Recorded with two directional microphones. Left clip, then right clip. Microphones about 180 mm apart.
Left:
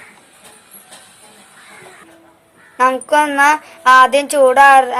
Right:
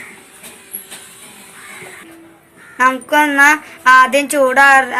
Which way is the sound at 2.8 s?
40° left (ahead or behind).